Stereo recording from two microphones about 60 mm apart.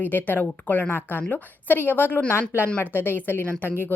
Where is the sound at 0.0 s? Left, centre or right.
Left.